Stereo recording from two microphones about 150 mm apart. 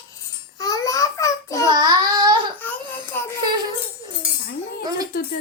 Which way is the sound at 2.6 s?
10° left (ahead or behind).